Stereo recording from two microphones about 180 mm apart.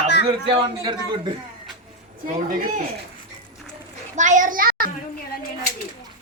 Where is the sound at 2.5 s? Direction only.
50° right (ahead or behind).